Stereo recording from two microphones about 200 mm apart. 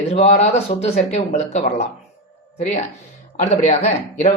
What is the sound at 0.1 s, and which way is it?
Speech, 35° left (ahead or behind).